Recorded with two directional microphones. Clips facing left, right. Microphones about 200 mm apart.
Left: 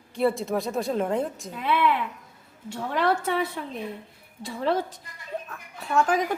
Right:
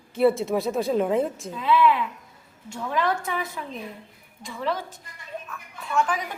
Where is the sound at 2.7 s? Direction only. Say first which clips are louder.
Left 1 dB; 35° left (ahead or behind).